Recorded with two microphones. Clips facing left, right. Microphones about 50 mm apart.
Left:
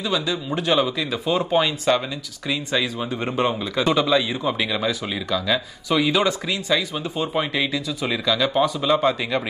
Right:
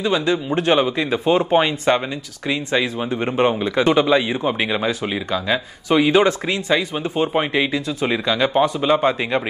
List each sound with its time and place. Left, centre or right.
0.0 s a man's voice: right